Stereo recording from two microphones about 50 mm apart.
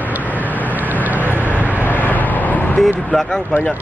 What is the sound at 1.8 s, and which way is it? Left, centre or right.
Vehicle, left.